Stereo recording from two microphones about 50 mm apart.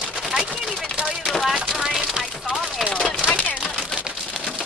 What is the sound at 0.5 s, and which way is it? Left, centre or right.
Chopping, centre.